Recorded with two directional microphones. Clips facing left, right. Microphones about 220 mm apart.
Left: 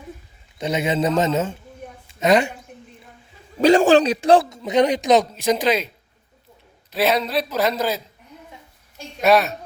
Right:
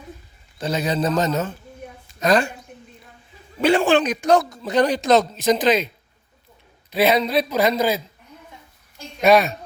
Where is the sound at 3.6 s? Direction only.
40° left (ahead or behind); by 5.9 s 10° left (ahead or behind).